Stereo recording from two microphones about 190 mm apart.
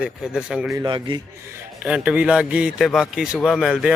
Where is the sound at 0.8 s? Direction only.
25° right (ahead or behind).